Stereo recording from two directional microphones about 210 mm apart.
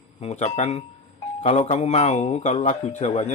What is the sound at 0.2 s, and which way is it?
Speech, 30° left (ahead or behind).